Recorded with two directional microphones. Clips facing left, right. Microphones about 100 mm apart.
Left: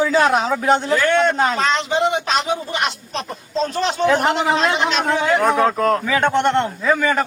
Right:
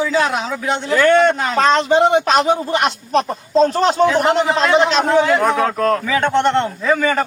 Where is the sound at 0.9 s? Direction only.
40° right (ahead or behind).